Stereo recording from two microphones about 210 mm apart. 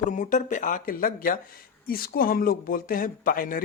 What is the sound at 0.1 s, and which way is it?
Speech, 35° left (ahead or behind).